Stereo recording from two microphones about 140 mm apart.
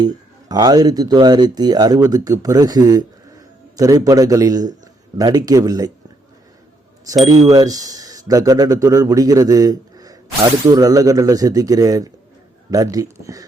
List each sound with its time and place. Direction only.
0.0 s a man's voice: 30° right (ahead or behind)
7.4 s a man's voice: 25° right (ahead or behind)